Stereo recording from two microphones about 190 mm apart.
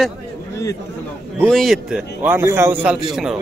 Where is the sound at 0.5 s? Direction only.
15° left (ahead or behind).